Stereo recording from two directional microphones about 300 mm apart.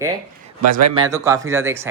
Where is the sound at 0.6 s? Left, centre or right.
Right.